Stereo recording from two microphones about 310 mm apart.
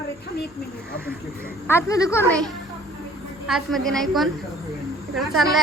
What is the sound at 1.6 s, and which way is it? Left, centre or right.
Speech, centre.